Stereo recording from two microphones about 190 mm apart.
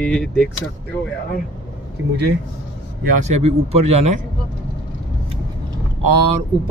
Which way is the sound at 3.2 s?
35° right (ahead or behind).